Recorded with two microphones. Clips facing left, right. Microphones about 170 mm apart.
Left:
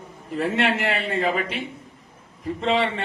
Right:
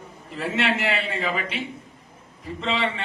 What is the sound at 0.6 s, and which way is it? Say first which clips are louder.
A man's voice: right 2 dB; 50° left (ahead or behind).